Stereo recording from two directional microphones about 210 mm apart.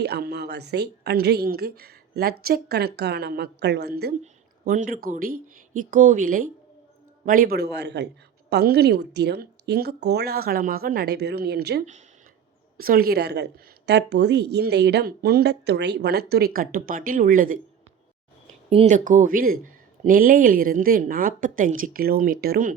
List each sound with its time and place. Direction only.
0.0 s a woman's voice: 50° right (ahead or behind)
4.2 s a woman's voice: 35° right (ahead or behind)
18.7 s speech: 30° right (ahead or behind)